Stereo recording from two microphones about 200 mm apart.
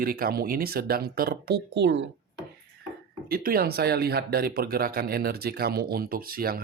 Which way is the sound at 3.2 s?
50° right (ahead or behind).